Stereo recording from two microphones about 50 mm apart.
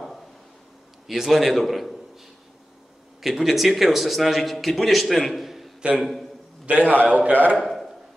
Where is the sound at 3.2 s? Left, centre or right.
Centre.